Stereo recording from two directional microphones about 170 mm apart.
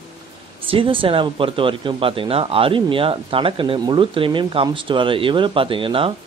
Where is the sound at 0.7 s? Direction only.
30° right (ahead or behind).